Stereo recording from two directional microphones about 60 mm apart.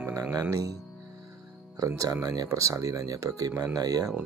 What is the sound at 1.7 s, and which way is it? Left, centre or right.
Speech, right.